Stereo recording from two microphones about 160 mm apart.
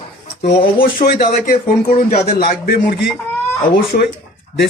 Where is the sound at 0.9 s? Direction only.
60° left (ahead or behind).